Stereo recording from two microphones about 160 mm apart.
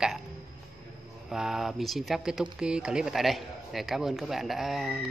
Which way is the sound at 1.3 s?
5° right (ahead or behind).